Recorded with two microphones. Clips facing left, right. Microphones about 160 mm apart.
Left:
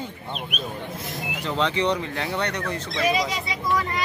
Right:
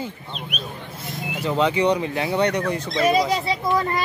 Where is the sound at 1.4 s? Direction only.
10° right (ahead or behind).